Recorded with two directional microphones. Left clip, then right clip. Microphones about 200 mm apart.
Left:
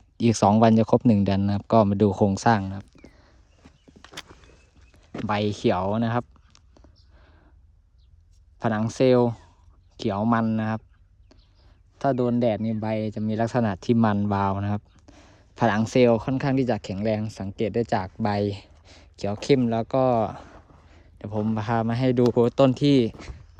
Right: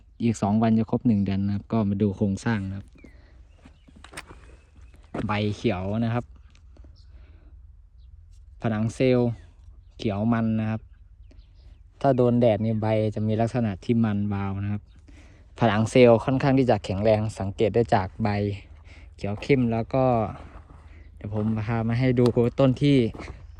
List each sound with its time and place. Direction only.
0.2 s speech: 25° left (ahead or behind); by 3.3 s centre (ahead or behind)
3.6 s walk: 5° left (ahead or behind)
8.5 s speech: 5° left (ahead or behind)
11.9 s speech: 5° right (ahead or behind); by 15.2 s 15° left (ahead or behind)
15.5 s speech: centre (ahead or behind)